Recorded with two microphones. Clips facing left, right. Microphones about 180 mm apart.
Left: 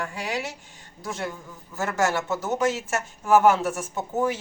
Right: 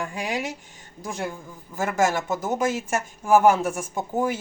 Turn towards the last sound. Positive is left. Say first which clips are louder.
# right 1 dB
turn(degrees=-10)  # may be behind; listen again after turning